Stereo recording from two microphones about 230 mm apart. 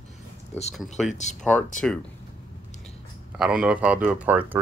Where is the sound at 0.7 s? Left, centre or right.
Centre.